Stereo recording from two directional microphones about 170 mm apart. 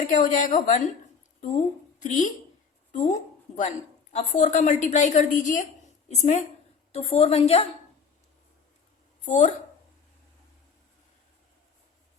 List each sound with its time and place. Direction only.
0.1 s a woman's voice: 50° left (ahead or behind)
2.0 s a woman's voice: 45° left (ahead or behind)
9.2 s a woman's voice: 45° left (ahead or behind)